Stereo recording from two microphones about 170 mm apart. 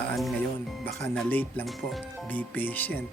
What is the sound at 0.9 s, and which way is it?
Speech, 5° left (ahead or behind).